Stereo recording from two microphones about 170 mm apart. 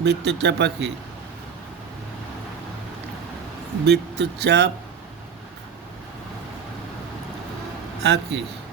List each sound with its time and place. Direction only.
0.0 s speech: 85° right
3.8 s speech: 80° right
8.0 s speech: 90° right